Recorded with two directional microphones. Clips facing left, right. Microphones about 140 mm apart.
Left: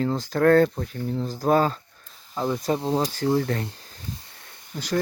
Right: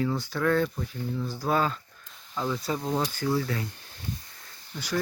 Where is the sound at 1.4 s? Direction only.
40° left (ahead or behind).